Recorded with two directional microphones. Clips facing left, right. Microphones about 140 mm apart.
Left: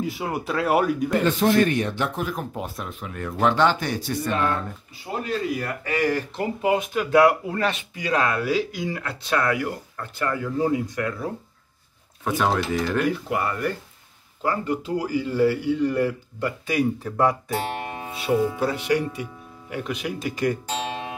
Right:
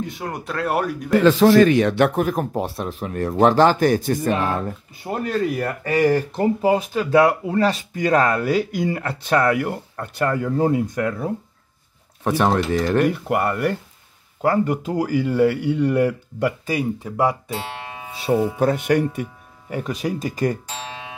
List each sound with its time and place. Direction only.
0.0 s speech: 5° left (ahead or behind)
1.2 s a man's voice: 90° right; by 2.4 s 50° right (ahead or behind)
2.5 s speech: 35° right (ahead or behind)
5.1 s speech: 50° right (ahead or behind)
8.0 s speech: 45° right (ahead or behind)
12.2 s speech: 35° right (ahead or behind); by 16.5 s 65° right (ahead or behind)
17.0 s speech: 10° right (ahead or behind)
18.3 s speech: 50° right (ahead or behind)
19.7 s speech: 40° right (ahead or behind)